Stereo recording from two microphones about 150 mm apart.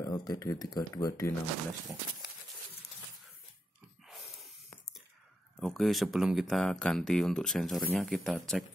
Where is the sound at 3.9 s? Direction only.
Centre (ahead or behind).